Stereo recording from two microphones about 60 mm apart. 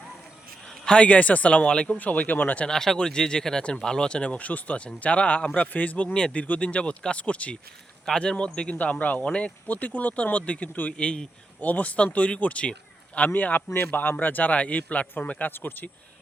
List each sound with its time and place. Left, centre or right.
0.9 s speech: centre
2.6 s speech: centre; by 15.9 s left